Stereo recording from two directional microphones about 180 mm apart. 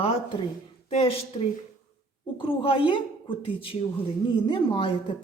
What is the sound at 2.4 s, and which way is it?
A woman's voice, 30° left (ahead or behind).